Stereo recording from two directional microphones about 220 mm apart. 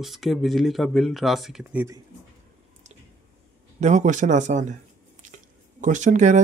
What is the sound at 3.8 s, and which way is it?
Speech, 35° right (ahead or behind).